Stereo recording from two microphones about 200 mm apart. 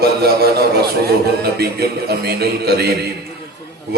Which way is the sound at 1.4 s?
55° right (ahead or behind).